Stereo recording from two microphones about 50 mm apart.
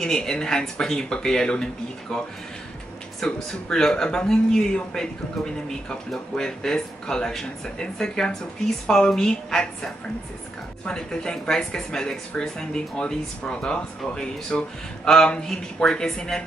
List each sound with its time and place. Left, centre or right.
0.0 s speech: centre
10.9 s speech: centre